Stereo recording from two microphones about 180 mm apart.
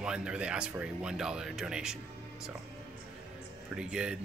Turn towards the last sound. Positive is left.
turn(degrees=-5)  # may be behind; listen again after turning